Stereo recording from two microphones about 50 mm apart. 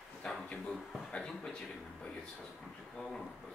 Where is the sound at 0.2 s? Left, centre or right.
Centre.